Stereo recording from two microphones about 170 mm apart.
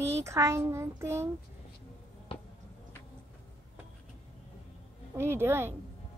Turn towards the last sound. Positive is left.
turn(degrees=-15)  # may be behind; listen again after turning